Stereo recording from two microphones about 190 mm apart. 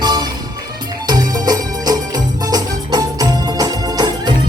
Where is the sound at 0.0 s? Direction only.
20° right (ahead or behind).